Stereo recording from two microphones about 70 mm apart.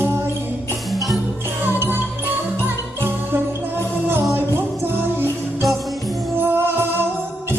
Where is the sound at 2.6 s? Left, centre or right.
Right.